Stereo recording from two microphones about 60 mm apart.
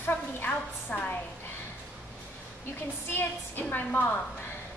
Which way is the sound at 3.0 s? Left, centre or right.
Left.